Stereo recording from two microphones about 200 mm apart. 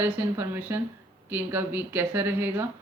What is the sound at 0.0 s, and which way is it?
Mantra, 10° right (ahead or behind).